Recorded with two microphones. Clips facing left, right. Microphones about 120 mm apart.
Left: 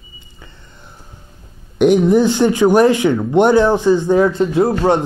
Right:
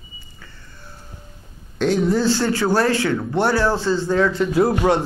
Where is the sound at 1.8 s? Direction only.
15° left (ahead or behind).